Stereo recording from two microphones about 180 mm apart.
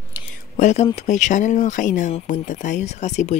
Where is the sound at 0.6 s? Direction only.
40° left (ahead or behind).